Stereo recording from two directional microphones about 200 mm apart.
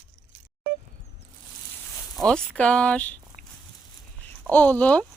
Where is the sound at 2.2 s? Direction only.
5° left (ahead or behind).